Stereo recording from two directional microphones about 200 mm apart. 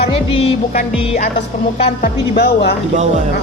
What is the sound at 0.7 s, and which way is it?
Music, 40° left (ahead or behind).